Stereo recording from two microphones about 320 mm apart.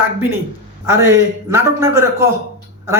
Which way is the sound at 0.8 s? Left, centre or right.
Centre.